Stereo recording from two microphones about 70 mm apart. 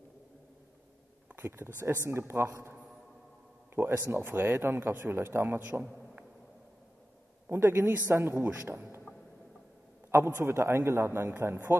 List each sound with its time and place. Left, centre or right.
1.3 s a man's voice: right
3.7 s a man's voice: right
7.4 s a man's voice: right
10.1 s a man's voice: right